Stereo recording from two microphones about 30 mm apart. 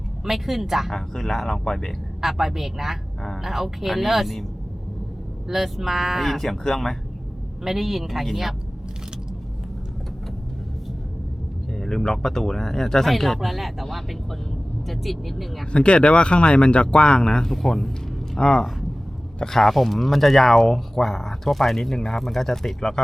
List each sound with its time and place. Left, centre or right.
0.3 s speech: centre
0.9 s speech: centre
2.2 s speech: centre
5.5 s speech: centre
6.3 s speech: centre
7.6 s speech: centre
11.7 s speech: centre
15.7 s speech: left
17.5 s speech: centre
18.3 s speech: left
19.5 s speech: centre